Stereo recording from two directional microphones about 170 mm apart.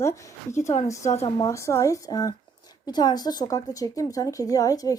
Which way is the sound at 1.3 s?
20° left (ahead or behind).